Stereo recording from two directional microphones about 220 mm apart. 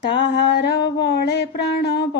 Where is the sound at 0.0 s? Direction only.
50° left (ahead or behind).